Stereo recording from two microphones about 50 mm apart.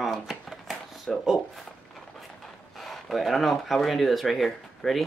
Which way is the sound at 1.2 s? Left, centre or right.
Centre.